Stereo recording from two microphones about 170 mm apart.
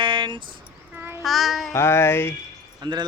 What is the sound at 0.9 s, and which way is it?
Child singing, 15° right (ahead or behind).